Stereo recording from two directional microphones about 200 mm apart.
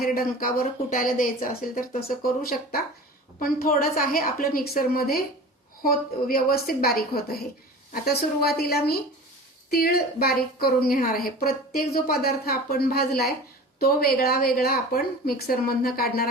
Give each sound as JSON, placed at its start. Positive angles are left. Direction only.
{"t": 0.0, "sound": "a woman's voice", "side_deg": 45}